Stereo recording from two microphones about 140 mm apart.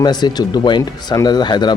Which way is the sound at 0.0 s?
30° left (ahead or behind).